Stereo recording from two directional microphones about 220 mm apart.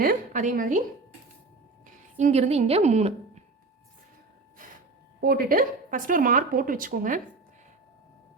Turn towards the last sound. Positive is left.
turn(degrees=-35)  # may be behind; listen again after turning